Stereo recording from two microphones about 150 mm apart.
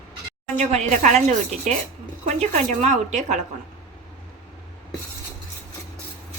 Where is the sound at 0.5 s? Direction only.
50° right (ahead or behind).